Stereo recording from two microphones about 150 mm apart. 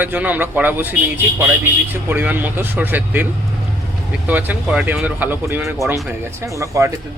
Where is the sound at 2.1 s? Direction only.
10° right (ahead or behind).